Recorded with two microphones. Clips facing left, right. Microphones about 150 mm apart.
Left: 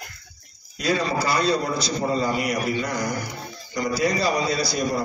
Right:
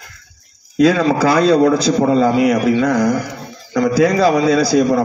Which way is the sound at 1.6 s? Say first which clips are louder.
Right 12 dB; 90° right.